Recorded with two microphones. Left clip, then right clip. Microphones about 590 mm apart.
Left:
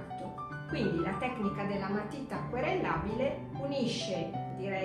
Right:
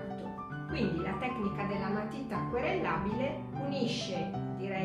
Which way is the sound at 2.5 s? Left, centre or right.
Centre.